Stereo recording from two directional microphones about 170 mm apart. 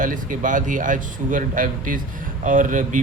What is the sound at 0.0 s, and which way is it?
Speech, 50° right (ahead or behind).